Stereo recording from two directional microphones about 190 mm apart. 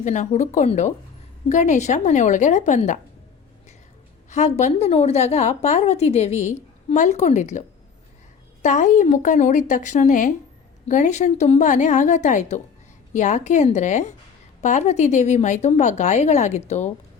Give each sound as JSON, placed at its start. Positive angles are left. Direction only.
{"t": 0.0, "sound": "a woman's voice", "side_deg": 40}
{"t": 4.3, "sound": "a woman's voice", "side_deg": 35}
{"t": 8.6, "sound": "a woman's voice", "side_deg": 40}